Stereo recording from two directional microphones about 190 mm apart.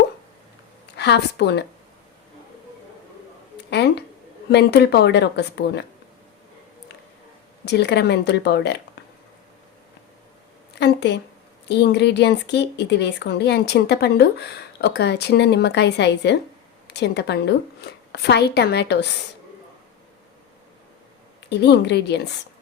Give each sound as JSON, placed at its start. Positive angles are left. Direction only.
{"t": 0.9, "sound": "speech", "side_deg": 65}
{"t": 3.7, "sound": "a sound", "side_deg": 65}
{"t": 4.5, "sound": "speech", "side_deg": 60}
{"t": 7.6, "sound": "speech", "side_deg": 65}
{"t": 10.8, "sound": "a sound", "side_deg": 60}
{"t": 11.7, "sound": "a woman's voice", "side_deg": 65}
{"t": 21.5, "sound": "speech", "side_deg": 65}